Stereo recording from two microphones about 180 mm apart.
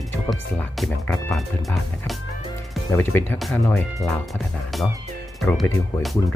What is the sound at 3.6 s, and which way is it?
Speech, 15° left (ahead or behind).